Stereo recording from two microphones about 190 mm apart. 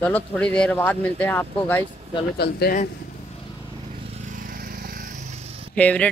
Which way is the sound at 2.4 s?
55° left (ahead or behind).